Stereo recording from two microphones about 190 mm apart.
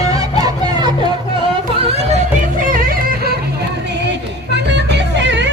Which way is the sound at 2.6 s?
50° right (ahead or behind).